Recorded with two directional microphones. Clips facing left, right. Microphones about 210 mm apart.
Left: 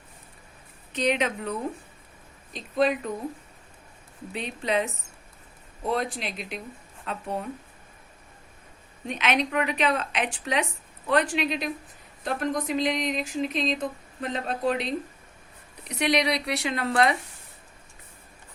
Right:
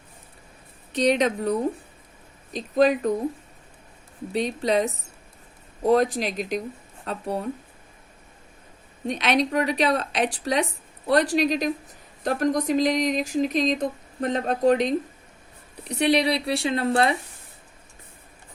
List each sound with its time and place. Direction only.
0.9 s speech: 35° right (ahead or behind)
4.3 s speech: 40° right (ahead or behind)
9.0 s speech: 35° right (ahead or behind)
15.8 s speech: 30° right (ahead or behind)